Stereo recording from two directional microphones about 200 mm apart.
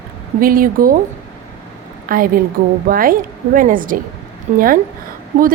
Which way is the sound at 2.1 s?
45° right (ahead or behind).